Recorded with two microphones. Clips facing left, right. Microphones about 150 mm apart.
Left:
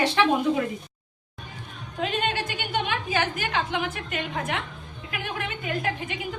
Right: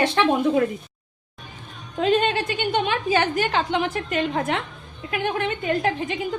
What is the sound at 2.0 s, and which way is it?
A woman's voice, 30° right (ahead or behind).